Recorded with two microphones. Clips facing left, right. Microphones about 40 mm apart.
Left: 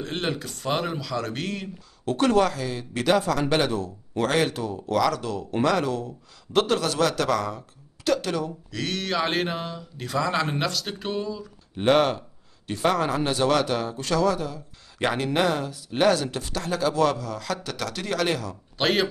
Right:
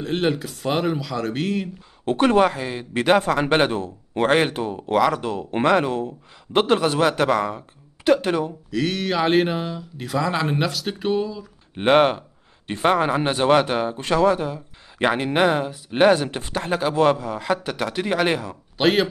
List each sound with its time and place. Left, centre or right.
0.0 s speech: centre
2.0 s speech: right
8.6 s speech: centre
11.7 s speech: right
18.8 s speech: centre